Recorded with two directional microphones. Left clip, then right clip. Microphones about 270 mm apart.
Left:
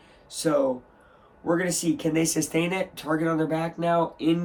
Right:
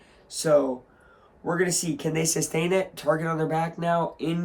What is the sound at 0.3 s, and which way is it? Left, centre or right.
Speech, centre.